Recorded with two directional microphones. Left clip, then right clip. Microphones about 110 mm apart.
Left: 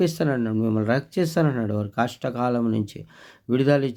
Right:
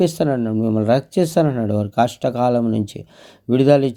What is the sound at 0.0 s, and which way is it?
Speech, 25° right (ahead or behind).